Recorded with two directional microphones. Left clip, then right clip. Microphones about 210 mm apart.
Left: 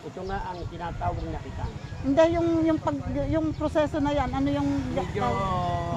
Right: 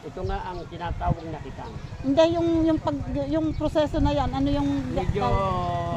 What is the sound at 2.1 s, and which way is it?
Speech, centre (ahead or behind).